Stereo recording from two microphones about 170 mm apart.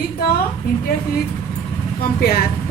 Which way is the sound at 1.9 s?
65° left (ahead or behind).